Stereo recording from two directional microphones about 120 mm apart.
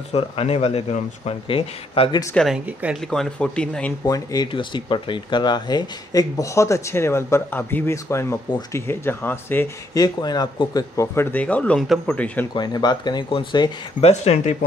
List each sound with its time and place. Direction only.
0.1 s speech: 60° left (ahead or behind)
2.3 s speech: centre (ahead or behind)
2.6 s speech: 10° right (ahead or behind)
3.0 s speech: 5° left (ahead or behind)
4.0 s speech: 30° left (ahead or behind)
9.9 s speech: 35° left (ahead or behind)
11.1 s speech: 10° left (ahead or behind)
12.5 s speech: 35° left (ahead or behind)
14.0 s speech: 65° left (ahead or behind)